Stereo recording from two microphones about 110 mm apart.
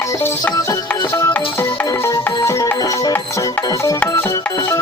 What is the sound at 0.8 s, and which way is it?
Music, 20° left (ahead or behind).